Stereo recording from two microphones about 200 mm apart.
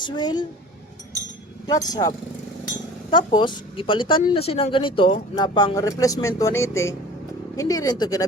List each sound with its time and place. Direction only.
0.0 s speech: 20° left (ahead or behind)
1.6 s speech: 20° left (ahead or behind)